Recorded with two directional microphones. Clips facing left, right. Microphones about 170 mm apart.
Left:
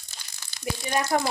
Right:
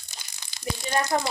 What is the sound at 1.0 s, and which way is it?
Speech, 20° right (ahead or behind).